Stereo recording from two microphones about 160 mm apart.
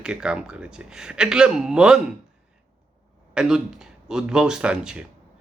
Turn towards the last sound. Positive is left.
turn(degrees=-5)  # may be behind; listen again after turning